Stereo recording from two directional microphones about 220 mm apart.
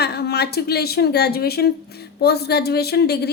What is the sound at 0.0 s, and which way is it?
A woman's voice, 50° left (ahead or behind).